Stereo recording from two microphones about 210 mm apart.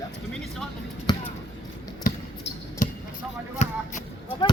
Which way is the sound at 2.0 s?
45° left (ahead or behind).